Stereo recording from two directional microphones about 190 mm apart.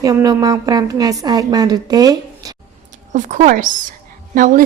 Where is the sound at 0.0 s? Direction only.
20° right (ahead or behind).